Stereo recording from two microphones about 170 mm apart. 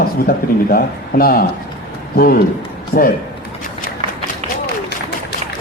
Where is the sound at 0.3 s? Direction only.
60° left (ahead or behind).